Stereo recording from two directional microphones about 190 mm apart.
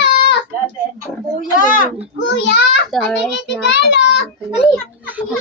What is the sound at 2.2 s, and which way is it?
Speech, 65° left (ahead or behind).